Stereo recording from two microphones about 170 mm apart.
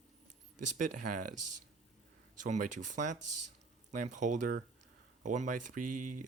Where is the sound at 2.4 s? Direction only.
45° right (ahead or behind).